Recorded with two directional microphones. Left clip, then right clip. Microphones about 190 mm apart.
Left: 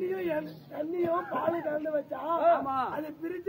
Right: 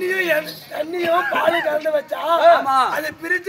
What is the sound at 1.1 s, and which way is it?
Speech, 35° right (ahead or behind).